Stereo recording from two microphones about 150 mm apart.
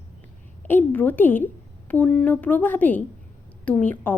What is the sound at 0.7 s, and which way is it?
A woman's voice, 10° left (ahead or behind).